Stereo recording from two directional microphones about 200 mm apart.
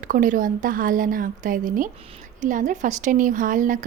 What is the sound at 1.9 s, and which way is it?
Speech, 30° right (ahead or behind).